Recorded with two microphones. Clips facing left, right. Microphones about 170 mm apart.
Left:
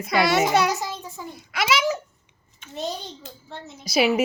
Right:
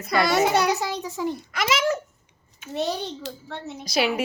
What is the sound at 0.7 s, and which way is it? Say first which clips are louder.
Speech: right 3 dB; 70° right (ahead or behind).